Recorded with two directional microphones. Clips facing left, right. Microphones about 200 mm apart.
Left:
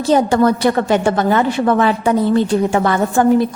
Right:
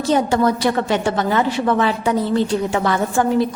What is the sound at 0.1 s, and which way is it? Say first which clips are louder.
A woman's voice: left 4 dB; 50° left (ahead or behind).